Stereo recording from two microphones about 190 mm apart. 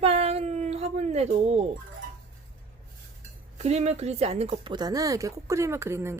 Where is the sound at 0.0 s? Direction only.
30° right (ahead or behind).